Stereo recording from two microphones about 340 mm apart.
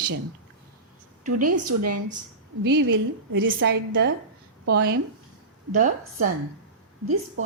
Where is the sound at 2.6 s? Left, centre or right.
Right.